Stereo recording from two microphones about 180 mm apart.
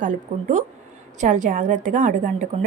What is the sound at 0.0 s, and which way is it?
A woman's voice, 45° right (ahead or behind).